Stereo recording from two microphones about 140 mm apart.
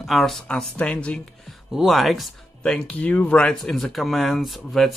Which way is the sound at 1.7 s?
Centre (ahead or behind).